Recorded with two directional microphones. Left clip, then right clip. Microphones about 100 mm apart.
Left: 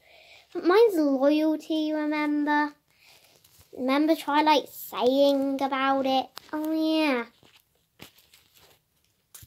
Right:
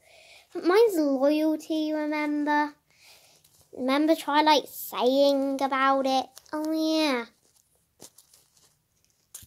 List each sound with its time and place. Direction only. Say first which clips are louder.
0.1 s speech: left 1 dB; 15° right (ahead or behind)
3.7 s a woman's voice: even; 30° right (ahead or behind)
9.3 s a sound: right 3 dB; 10° right (ahead or behind)